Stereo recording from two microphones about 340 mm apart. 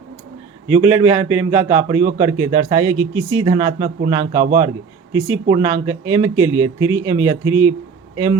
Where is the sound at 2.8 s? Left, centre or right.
Right.